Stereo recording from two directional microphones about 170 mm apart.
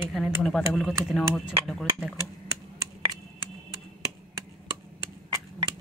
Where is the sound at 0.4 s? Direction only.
5° left (ahead or behind).